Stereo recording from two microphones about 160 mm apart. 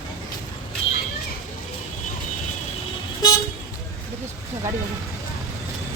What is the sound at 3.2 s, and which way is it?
Vehicle, 25° left (ahead or behind).